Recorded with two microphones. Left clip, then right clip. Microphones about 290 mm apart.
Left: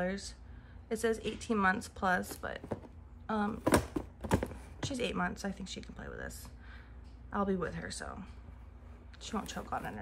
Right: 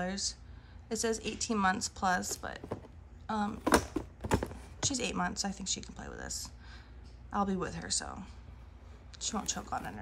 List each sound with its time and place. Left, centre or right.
0.0 s speech: centre